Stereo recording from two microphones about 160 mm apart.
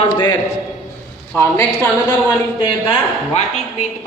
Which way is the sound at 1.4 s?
15° left (ahead or behind).